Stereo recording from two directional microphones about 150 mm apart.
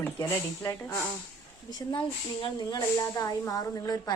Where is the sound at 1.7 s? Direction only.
30° left (ahead or behind).